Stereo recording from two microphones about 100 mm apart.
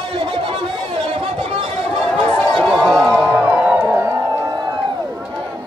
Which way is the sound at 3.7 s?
25° right (ahead or behind).